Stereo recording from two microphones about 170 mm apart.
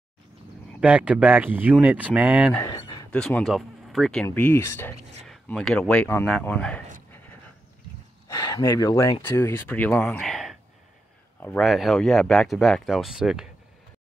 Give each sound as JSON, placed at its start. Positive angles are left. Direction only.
{"t": 0.7, "sound": "speech", "side_deg": -10}
{"t": 2.6, "sound": "a sound", "side_deg": 20}
{"t": 3.1, "sound": "speech", "side_deg": 5}
{"t": 5.2, "sound": "speech", "side_deg": 5}
{"t": 8.3, "sound": "speech", "side_deg": 20}
{"t": 11.3, "sound": "speech", "side_deg": 10}
{"t": 11.6, "sound": "speech", "side_deg": 0}